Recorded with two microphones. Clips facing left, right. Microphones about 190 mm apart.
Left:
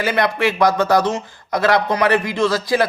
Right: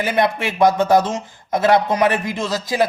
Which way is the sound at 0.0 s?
20° right (ahead or behind).